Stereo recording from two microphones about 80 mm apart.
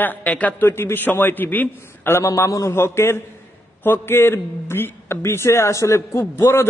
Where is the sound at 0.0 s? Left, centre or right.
Left.